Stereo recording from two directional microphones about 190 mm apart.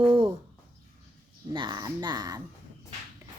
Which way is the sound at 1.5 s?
20° right (ahead or behind).